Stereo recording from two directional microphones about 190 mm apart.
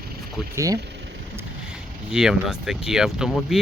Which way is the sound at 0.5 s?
15° right (ahead or behind).